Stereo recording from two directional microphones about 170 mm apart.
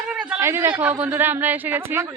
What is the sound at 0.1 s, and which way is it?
A woman's voice, 10° right (ahead or behind).